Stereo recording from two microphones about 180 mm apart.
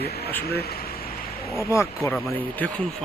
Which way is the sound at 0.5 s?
60° left (ahead or behind).